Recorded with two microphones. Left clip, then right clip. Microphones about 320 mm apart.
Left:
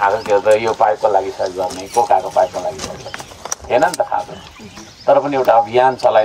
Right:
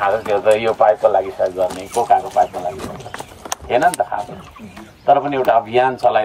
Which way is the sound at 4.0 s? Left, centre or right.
Centre.